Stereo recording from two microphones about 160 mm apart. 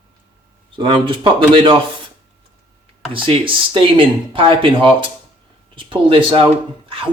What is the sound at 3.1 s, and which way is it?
Speech, 35° right (ahead or behind).